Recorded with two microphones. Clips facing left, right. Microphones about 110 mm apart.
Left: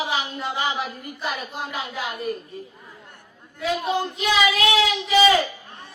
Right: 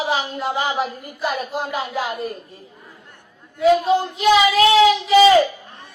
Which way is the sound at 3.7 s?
35° right (ahead or behind).